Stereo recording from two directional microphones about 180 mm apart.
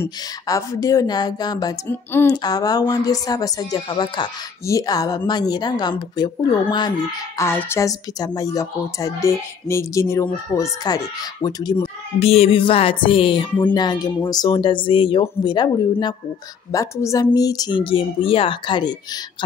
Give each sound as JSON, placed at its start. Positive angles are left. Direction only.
{"t": 0.0, "sound": "speech", "side_deg": 15}
{"t": 7.3, "sound": "a woman's voice", "side_deg": 15}
{"t": 12.2, "sound": "speech", "side_deg": 35}